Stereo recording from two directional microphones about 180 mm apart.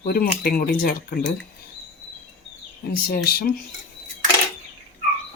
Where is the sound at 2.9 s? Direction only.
55° left (ahead or behind).